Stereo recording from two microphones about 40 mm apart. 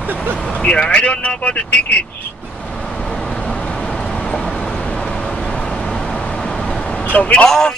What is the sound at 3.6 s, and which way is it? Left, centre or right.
Vehicle, centre.